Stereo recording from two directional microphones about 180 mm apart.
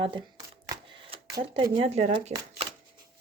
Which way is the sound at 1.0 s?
30° right (ahead or behind).